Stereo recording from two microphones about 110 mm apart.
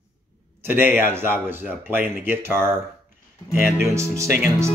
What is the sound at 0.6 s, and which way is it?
A man's voice, 20° right (ahead or behind).